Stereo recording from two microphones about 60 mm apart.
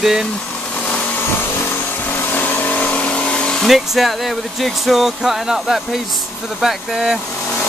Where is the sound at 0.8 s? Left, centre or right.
Left.